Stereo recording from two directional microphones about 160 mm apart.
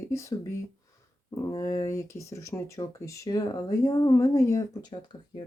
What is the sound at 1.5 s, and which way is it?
Speech, 20° left (ahead or behind).